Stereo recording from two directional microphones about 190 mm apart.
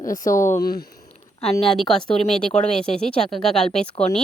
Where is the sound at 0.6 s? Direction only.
50° left (ahead or behind).